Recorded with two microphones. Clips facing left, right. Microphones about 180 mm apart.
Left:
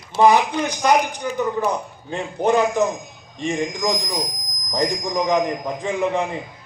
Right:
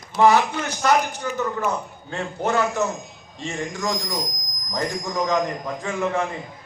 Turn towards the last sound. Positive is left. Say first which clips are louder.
# left 3 dB
turn(degrees=15)  # may be behind; listen again after turning